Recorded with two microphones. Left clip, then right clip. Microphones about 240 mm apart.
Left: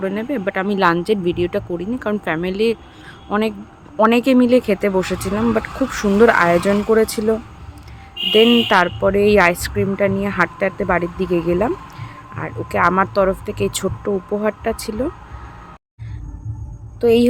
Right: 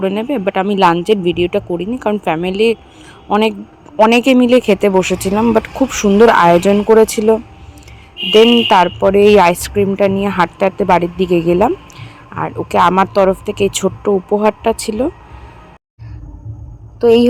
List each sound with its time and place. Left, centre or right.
0.0 s speech: centre
17.0 s speech: centre